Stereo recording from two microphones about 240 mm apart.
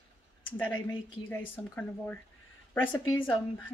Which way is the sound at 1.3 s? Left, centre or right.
Centre.